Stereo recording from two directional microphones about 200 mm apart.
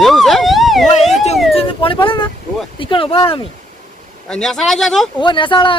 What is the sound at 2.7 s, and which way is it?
Speech, 25° left (ahead or behind).